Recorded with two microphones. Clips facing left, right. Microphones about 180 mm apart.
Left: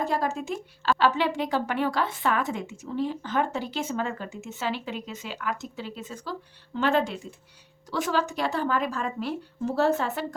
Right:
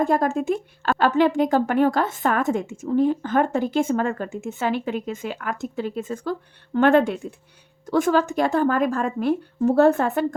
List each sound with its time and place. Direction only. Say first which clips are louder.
0.0 s speech: right 7 dB; 50° right (ahead or behind)